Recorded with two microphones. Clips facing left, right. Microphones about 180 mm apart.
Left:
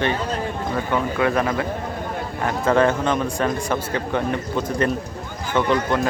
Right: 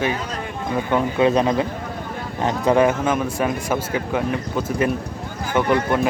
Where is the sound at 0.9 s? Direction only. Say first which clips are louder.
Right 4 dB; 20° right (ahead or behind).